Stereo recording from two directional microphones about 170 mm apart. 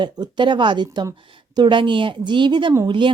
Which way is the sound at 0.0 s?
25° right (ahead or behind).